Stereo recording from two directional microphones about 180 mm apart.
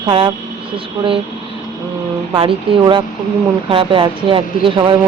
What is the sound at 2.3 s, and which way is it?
Speech, 30° right (ahead or behind).